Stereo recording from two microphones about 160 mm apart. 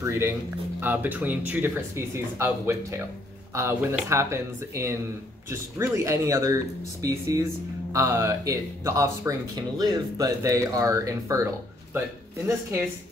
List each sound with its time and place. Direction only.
0.0 s speech: 15° right (ahead or behind)